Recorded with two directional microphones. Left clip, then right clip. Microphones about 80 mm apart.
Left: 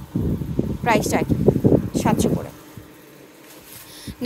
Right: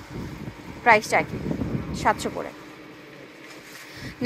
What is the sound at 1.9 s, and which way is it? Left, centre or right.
Speech, left.